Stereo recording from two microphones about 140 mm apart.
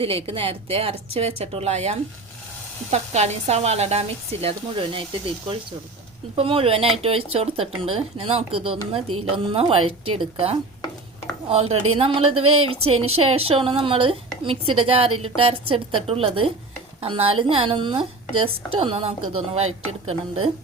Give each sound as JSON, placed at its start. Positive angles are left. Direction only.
{"t": 0.0, "sound": "speech", "side_deg": -45}
{"t": 6.3, "sound": "a woman's voice", "side_deg": -40}